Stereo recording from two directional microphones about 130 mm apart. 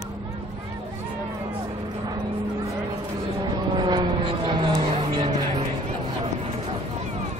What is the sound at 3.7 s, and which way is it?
Vehicle, 35° right (ahead or behind).